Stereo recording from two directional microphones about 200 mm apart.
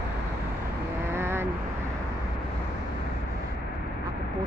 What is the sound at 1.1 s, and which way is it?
Vehicle, 10° right (ahead or behind).